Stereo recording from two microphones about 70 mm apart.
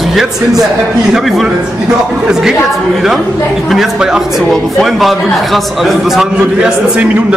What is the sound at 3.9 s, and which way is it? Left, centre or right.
A man's voice, centre.